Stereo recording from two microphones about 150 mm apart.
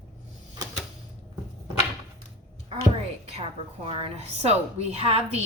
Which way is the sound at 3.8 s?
40° right (ahead or behind).